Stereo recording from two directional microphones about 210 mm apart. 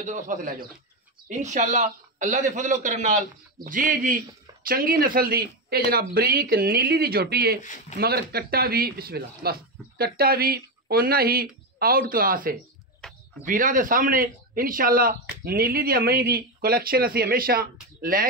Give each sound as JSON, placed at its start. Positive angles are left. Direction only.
{"t": 0.0, "sound": "a man's voice", "side_deg": -40}
{"t": 13.0, "sound": "a sound", "side_deg": 5}
{"t": 13.5, "sound": "a man's voice", "side_deg": -40}